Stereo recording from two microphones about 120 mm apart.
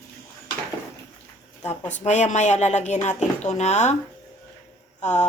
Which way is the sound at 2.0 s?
80° left.